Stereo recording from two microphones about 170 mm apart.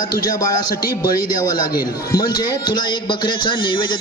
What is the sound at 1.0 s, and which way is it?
A man's voice, 25° left (ahead or behind).